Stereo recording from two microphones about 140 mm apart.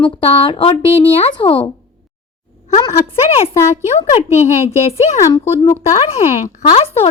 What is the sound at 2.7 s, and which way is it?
Speech, 25° left (ahead or behind).